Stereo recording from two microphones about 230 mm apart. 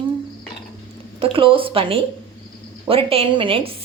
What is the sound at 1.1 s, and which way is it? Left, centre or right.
Speech, right.